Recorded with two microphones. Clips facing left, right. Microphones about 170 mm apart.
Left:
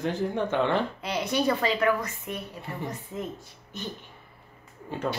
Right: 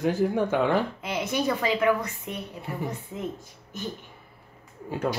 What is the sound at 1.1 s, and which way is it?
Speech, 20° right (ahead or behind).